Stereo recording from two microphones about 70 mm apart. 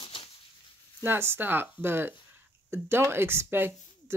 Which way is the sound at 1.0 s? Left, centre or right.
Right.